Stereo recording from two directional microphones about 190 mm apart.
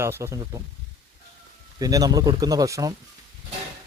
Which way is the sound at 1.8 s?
20° right (ahead or behind).